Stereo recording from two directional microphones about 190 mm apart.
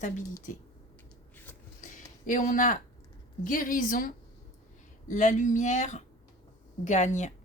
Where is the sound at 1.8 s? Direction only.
45° left (ahead or behind).